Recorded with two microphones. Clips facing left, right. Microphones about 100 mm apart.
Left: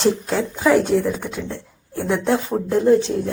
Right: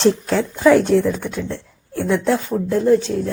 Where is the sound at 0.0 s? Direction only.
5° left (ahead or behind).